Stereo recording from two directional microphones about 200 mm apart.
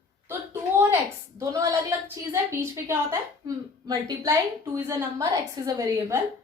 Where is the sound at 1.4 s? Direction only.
15° right (ahead or behind).